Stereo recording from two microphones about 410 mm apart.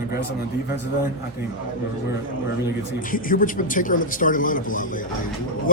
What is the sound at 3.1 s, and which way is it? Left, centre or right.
A man's voice, centre.